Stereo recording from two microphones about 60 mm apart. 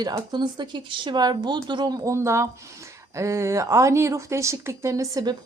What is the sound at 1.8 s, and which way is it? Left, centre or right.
Speech, right.